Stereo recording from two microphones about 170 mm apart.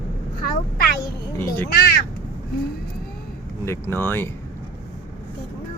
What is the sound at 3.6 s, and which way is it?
Speech, 15° left (ahead or behind).